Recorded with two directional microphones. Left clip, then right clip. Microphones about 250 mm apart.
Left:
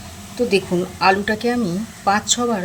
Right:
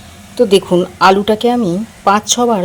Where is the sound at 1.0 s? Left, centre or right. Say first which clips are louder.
Right 6 dB; right.